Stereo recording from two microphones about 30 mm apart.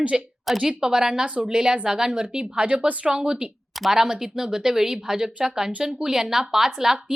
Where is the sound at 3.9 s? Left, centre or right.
Centre.